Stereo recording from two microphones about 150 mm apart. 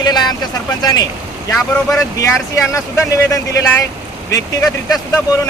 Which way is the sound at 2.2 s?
20° left (ahead or behind).